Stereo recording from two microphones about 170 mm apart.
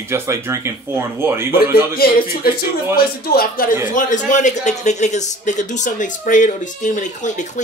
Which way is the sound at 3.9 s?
50° left (ahead or behind).